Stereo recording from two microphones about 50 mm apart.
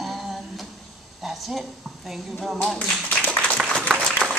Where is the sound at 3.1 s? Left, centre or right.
Left.